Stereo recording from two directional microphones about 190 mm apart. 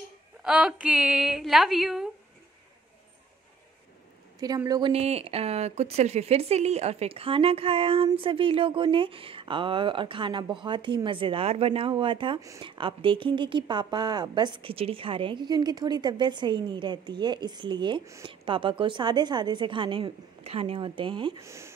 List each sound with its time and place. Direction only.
0.4 s a woman's voice: 5° right (ahead or behind)
4.6 s speech: 20° right (ahead or behind)
4.9 s speech: 35° right (ahead or behind)
21.5 s speech: 15° right (ahead or behind)